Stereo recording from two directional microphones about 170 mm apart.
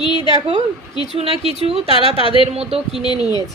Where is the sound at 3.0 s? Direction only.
25° left (ahead or behind).